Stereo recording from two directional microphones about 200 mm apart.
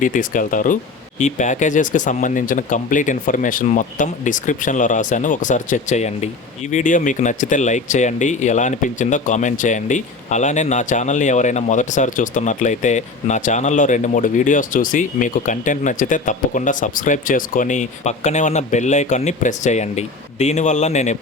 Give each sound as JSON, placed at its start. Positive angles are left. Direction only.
{"t": 0.0, "sound": "speech", "side_deg": 40}